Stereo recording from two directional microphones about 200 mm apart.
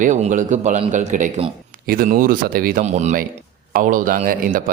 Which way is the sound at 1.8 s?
45° right (ahead or behind).